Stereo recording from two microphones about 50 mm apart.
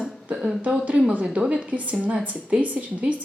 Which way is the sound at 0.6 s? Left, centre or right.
Right.